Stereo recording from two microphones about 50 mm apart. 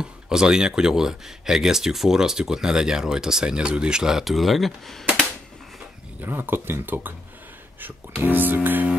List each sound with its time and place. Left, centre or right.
0.0 s speech: centre
4.2 s speech: centre
6.2 s speech: right